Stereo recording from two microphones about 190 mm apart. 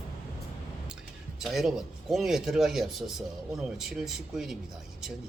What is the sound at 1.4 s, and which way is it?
Speech, centre (ahead or behind).